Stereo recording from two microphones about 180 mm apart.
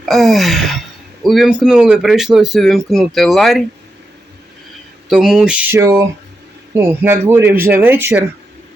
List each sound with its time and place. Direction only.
0.0 s a sound: centre (ahead or behind)
1.2 s speech: centre (ahead or behind)
5.0 s speech: centre (ahead or behind)
5.7 s speech: 20° right (ahead or behind)